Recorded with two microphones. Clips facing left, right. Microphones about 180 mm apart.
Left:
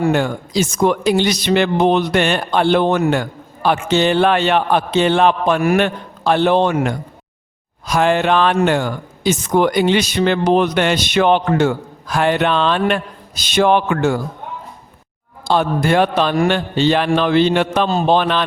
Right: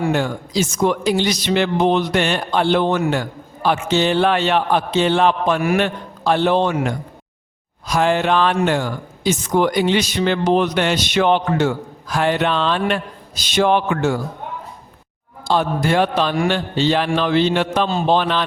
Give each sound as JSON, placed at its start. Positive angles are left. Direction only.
{"t": 0.0, "sound": "speech", "side_deg": 55}
{"t": 15.4, "sound": "speech", "side_deg": 60}